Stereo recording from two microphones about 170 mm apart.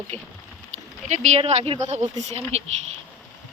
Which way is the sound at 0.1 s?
10° left (ahead or behind).